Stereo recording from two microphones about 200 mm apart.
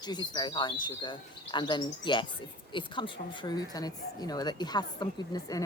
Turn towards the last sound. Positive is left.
turn(degrees=20)  # may be behind; listen again after turning